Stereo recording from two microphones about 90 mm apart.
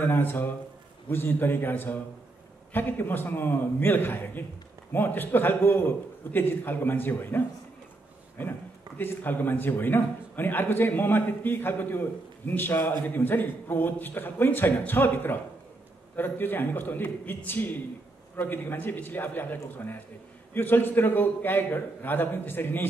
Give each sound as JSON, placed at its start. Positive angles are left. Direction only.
{"t": 0.0, "sound": "a man's voice", "side_deg": 20}